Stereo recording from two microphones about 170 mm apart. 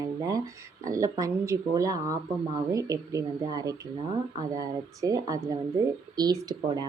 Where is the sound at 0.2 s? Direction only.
20° right (ahead or behind).